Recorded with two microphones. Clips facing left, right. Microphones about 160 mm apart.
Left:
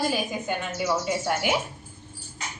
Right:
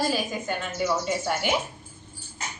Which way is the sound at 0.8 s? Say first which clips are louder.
Even; 5° left (ahead or behind).